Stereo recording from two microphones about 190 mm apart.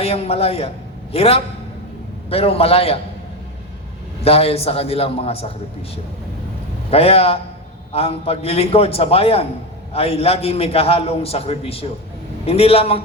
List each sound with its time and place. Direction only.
0.0 s a man's voice: 30° left (ahead or behind)
4.2 s a man's voice: 30° left (ahead or behind)
6.9 s a man's voice: 30° left (ahead or behind)